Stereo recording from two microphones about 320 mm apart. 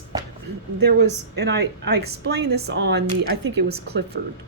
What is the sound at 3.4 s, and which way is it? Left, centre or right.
Speech, right.